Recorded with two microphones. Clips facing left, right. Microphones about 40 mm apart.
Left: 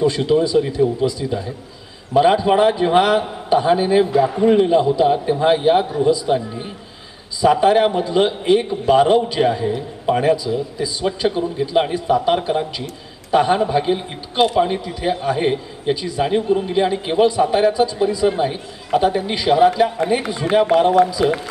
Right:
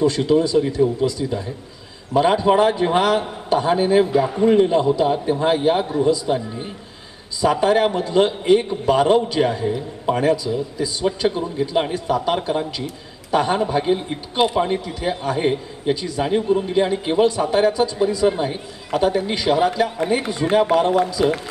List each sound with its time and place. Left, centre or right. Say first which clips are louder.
0.0 s a man's voice: left 1 dB; centre
2.1 s a man's voice: left 2 dB; centre